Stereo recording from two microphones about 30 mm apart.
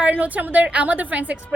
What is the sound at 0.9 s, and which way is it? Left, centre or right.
Speech, right.